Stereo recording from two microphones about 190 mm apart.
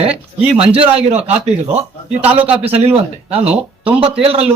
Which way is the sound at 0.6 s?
30° right (ahead or behind).